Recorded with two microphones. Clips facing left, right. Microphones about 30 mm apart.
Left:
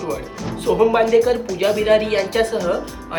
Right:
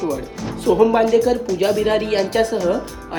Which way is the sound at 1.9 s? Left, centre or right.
Left.